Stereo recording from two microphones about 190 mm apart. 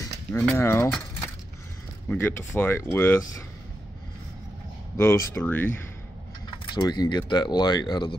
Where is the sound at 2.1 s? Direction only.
10° left (ahead or behind).